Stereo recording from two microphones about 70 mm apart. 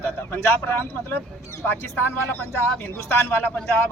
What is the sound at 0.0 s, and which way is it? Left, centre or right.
Speech, left.